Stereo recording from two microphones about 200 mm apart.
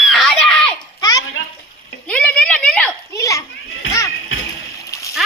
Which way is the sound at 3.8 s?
80° left.